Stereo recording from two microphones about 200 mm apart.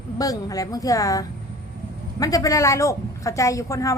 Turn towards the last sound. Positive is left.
turn(degrees=15)  # may be behind; listen again after turning